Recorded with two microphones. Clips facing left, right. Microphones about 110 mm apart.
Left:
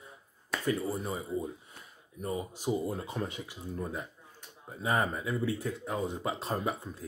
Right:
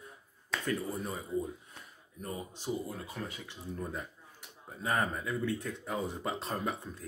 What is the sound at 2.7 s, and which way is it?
Speech, 25° left (ahead or behind).